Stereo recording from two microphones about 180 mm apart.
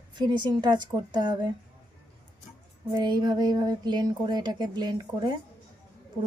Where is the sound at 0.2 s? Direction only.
25° right (ahead or behind).